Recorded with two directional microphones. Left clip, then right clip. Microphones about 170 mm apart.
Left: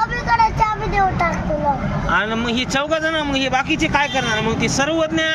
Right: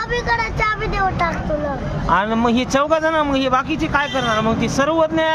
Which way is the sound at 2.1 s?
40° right (ahead or behind).